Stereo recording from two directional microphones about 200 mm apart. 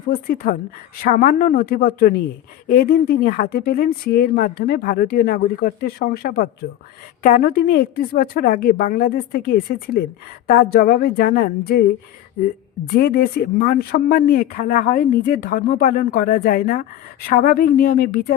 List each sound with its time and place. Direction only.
0.1 s a woman's voice: 50° left (ahead or behind)
12.9 s a woman's voice: 50° left (ahead or behind)